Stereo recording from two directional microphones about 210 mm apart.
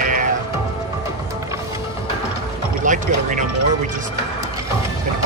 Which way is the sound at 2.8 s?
35° right (ahead or behind).